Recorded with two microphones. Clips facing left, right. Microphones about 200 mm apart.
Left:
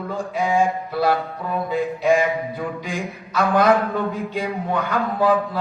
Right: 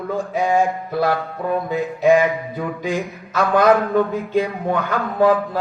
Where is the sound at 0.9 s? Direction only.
50° right (ahead or behind).